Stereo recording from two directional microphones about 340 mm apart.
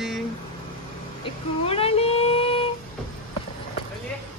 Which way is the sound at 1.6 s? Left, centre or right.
Centre.